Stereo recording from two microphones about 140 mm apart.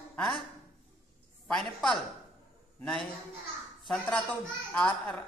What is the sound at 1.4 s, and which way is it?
A man's voice, centre (ahead or behind).